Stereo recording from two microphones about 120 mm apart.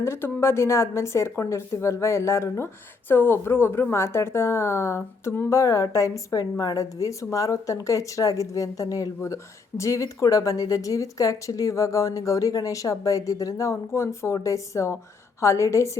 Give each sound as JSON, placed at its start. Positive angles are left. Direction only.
{"t": 0.0, "sound": "speech", "side_deg": 20}